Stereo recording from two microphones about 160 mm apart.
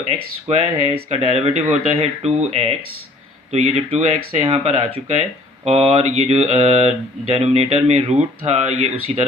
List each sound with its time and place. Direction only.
0.1 s mantra: 40° right (ahead or behind)
8.2 s speech: 40° right (ahead or behind)